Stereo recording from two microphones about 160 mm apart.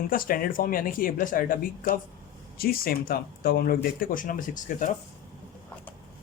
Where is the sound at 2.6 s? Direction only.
70° left (ahead or behind); by 4.9 s 55° left (ahead or behind).